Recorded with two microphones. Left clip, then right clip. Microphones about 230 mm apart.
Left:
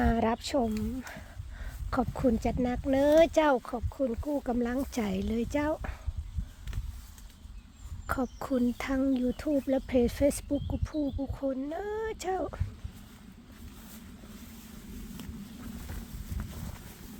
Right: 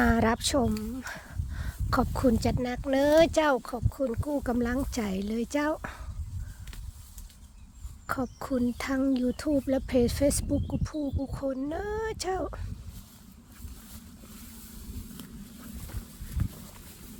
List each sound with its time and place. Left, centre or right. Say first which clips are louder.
0.0 s speech: right 3 dB; centre
8.0 s speech: even; centre